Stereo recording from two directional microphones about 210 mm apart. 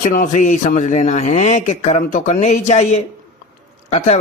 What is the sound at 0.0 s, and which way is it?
Speech, 35° left (ahead or behind).